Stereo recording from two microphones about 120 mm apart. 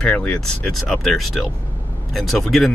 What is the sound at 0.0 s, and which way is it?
Speech, 10° left (ahead or behind).